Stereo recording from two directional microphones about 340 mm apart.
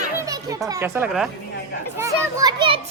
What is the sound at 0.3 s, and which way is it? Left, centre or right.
Music, centre.